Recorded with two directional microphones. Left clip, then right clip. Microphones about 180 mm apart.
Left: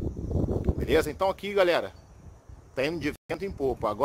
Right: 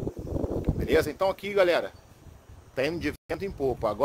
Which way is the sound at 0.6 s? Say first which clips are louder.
Right 1 dB; 10° left (ahead or behind).